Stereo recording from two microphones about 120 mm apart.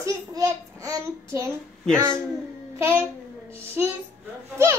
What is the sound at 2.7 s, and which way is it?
Speech, 20° right (ahead or behind).